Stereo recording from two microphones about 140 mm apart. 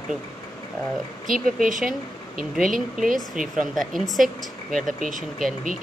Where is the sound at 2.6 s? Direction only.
Centre (ahead or behind).